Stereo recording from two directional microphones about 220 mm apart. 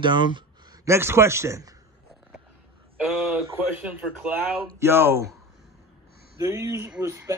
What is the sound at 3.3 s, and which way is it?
A man's voice, 5° right (ahead or behind).